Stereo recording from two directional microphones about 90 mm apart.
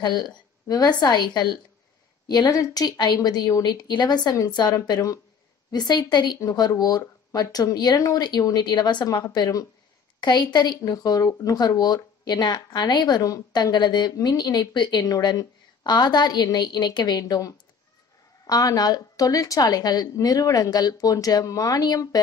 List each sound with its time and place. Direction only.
0.0 s speech: 50° left (ahead or behind)